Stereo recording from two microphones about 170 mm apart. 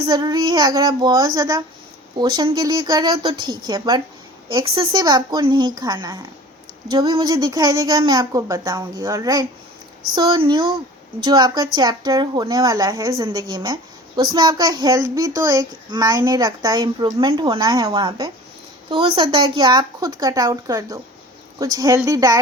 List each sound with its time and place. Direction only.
0.1 s speech: 25° right (ahead or behind)